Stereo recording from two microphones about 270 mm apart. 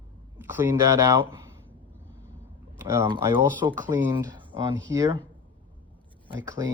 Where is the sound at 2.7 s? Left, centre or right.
Centre.